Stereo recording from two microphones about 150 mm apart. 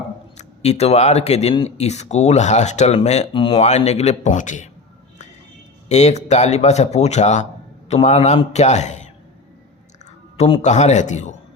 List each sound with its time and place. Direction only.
0.3 s speech: 45° left (ahead or behind)
5.9 s speech: 50° left (ahead or behind)
10.3 s speech: 45° left (ahead or behind)